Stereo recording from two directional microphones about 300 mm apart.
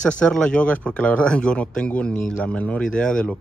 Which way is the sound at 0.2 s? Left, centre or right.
Centre.